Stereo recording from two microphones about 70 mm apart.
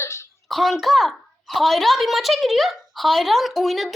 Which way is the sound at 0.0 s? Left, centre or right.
Left.